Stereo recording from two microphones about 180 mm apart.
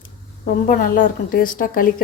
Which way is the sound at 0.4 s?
50° left (ahead or behind).